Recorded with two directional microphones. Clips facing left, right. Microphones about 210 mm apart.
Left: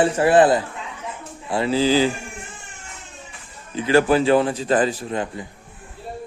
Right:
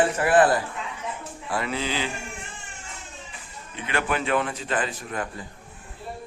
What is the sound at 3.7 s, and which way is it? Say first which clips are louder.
A man's voice: left 11 dB; 35° left (ahead or behind).